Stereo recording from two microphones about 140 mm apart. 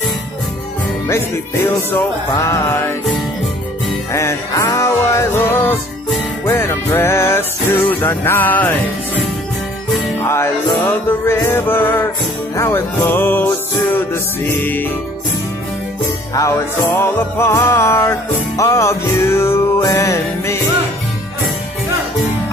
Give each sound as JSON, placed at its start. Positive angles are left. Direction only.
{"t": 2.3, "sound": "music", "side_deg": 20}
{"t": 4.1, "sound": "music", "side_deg": 20}
{"t": 10.2, "sound": "music", "side_deg": 20}
{"t": 17.0, "sound": "music", "side_deg": 20}